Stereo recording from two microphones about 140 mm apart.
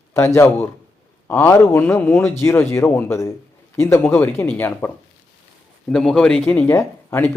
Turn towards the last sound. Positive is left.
turn(degrees=15)  # may be behind; listen again after turning